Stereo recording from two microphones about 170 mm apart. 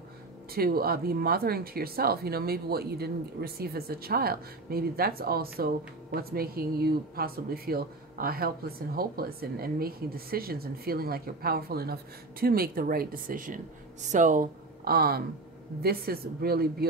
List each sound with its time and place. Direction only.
0.5 s speech: 60° right (ahead or behind)